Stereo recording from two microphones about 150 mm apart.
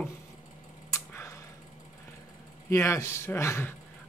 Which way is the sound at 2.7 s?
20° left (ahead or behind).